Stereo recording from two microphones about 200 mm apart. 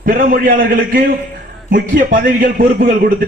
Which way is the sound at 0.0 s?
45° right (ahead or behind).